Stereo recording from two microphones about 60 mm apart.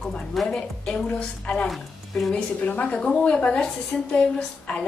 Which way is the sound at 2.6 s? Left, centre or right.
Left.